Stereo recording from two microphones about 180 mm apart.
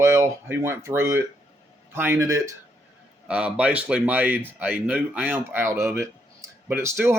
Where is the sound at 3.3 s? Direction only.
5° right (ahead or behind).